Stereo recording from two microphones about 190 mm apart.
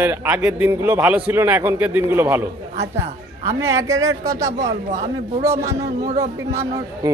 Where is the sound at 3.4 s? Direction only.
15° right (ahead or behind).